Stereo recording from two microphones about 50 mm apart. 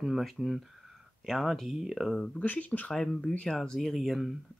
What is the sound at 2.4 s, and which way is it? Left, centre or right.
Speech, left.